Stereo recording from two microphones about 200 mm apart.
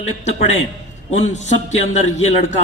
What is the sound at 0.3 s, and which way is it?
Speech, 35° left (ahead or behind).